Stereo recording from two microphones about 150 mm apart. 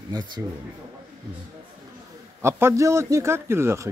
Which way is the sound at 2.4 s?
20° right (ahead or behind).